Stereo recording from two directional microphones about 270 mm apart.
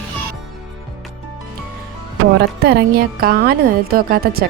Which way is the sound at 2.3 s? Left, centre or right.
Right.